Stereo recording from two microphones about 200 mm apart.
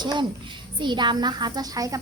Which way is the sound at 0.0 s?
20° right (ahead or behind).